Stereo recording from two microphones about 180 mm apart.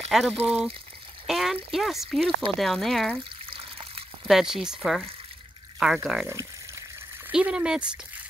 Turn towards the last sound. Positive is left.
turn(degrees=-5)  # may be behind; listen again after turning